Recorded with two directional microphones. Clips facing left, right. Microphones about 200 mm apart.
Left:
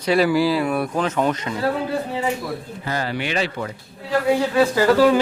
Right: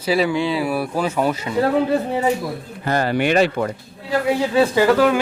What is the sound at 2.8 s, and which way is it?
Speech, 55° right (ahead or behind).